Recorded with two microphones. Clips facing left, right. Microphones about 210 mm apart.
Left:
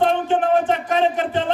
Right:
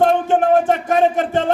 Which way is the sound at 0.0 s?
45° right (ahead or behind).